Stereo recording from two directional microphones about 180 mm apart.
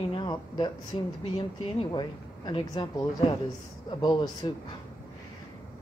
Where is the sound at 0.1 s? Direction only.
25° left (ahead or behind).